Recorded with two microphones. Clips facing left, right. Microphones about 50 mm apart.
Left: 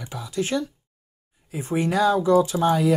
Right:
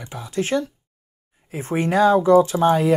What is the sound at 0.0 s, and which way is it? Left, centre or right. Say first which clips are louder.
Speech: right 2 dB; right.